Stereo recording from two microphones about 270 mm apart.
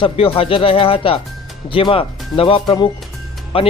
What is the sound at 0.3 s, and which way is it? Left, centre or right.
Speech, left.